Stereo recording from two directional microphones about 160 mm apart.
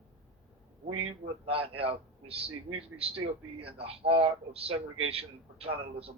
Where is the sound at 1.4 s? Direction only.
35° right (ahead or behind).